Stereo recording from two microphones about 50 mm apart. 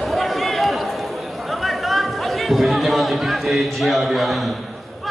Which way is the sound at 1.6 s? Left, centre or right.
Centre.